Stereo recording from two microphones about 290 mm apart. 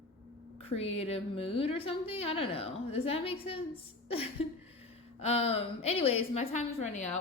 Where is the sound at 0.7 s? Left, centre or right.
Left.